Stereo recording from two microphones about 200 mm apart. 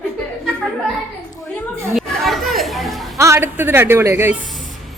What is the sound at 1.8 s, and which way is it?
Chatter, centre (ahead or behind).